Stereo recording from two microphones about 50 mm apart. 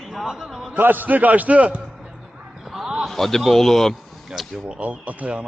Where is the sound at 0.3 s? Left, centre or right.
Centre.